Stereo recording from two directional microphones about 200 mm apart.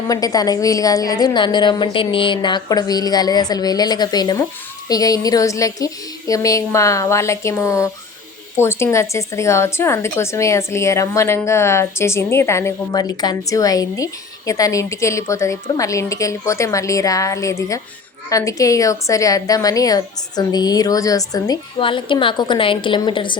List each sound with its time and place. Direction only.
0.1 s a woman's voice: 20° left (ahead or behind)